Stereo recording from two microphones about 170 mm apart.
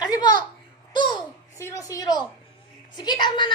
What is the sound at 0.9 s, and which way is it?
Babbling, 25° left (ahead or behind).